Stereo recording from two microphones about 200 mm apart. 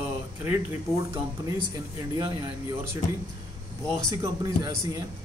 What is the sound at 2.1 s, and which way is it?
Speech, 15° right (ahead or behind).